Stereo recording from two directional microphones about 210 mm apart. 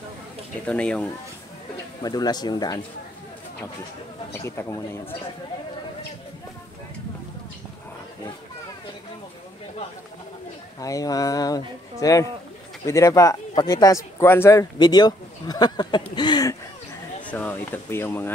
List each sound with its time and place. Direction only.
0.7 s speech: 5° left (ahead or behind)
2.0 s speech: 20° left (ahead or behind)
4.3 s speech: 10° left (ahead or behind)
10.8 s speech: 15° left (ahead or behind)
17.3 s speech: 10° left (ahead or behind)